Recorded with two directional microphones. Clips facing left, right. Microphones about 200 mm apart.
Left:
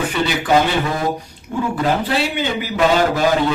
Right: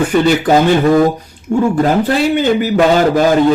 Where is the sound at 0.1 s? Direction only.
45° right (ahead or behind).